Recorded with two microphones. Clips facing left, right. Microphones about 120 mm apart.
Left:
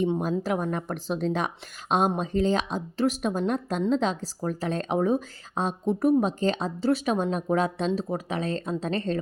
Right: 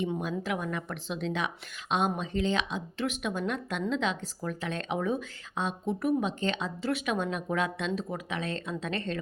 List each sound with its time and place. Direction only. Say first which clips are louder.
0.2 s a woman's voice: left 6 dB; 40° left (ahead or behind)